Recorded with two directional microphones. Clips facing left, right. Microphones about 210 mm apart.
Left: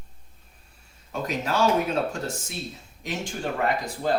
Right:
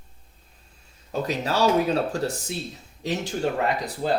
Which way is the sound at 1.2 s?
35° right (ahead or behind).